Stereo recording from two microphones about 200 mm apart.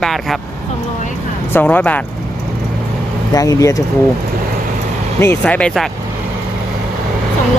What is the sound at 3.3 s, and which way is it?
Speech, 20° left (ahead or behind).